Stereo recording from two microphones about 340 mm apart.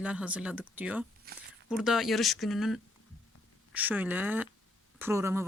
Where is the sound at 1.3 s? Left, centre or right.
Right.